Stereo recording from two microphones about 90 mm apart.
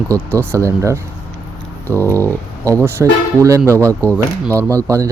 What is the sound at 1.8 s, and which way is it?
Speech, 20° left (ahead or behind).